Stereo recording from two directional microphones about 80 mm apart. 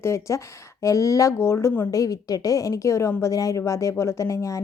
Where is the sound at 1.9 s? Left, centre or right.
Left.